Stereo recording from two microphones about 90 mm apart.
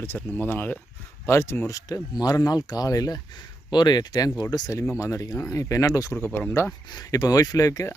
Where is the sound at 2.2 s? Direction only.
45° left (ahead or behind).